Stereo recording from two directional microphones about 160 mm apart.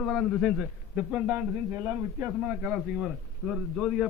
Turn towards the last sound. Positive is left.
turn(degrees=0)  # may be behind; listen again after turning